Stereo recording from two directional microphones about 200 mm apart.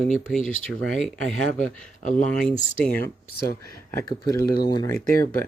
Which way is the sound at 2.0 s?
40° left (ahead or behind).